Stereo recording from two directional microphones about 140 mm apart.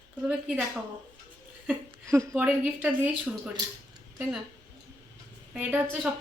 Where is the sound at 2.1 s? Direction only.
20° right (ahead or behind).